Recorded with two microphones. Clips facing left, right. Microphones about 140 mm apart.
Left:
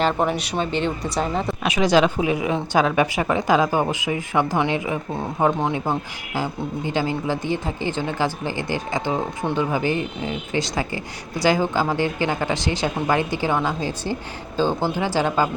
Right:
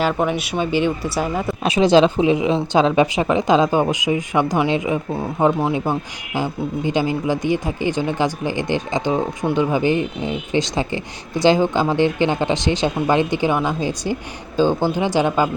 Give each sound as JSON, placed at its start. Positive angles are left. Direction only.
{"t": 0.1, "sound": "speech", "side_deg": 10}
{"t": 0.3, "sound": "speech", "side_deg": -5}
{"t": 1.6, "sound": "speech", "side_deg": -30}
{"t": 5.4, "sound": "speech", "side_deg": -10}